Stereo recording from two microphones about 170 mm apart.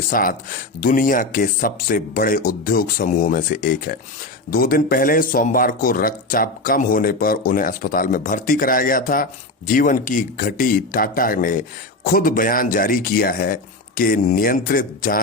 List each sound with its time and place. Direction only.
0.1 s speech: 55° left (ahead or behind)